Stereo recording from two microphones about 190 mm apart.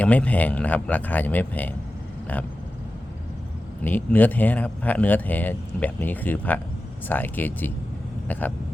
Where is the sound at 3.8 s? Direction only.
10° left (ahead or behind).